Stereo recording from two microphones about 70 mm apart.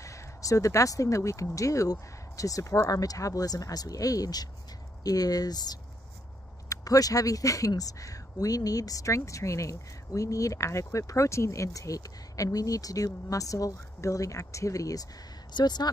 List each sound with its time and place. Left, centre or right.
0.0 s speech: left
6.7 s speech: left
15.5 s speech: left